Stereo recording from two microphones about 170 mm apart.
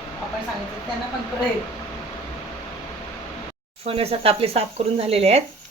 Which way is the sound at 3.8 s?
35° right (ahead or behind).